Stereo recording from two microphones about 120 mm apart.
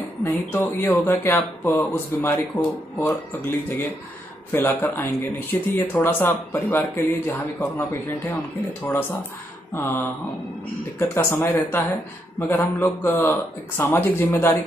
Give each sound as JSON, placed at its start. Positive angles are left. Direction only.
{"t": 0.2, "sound": "speech", "side_deg": 20}
{"t": 9.8, "sound": "speech", "side_deg": 15}